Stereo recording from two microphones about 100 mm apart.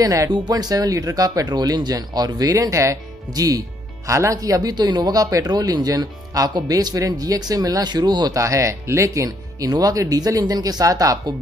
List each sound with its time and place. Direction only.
0.0 s speech: 35° right (ahead or behind)
8.4 s speech: 30° right (ahead or behind)